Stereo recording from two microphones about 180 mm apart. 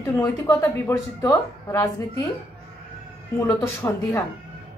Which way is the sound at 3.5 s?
15° left (ahead or behind).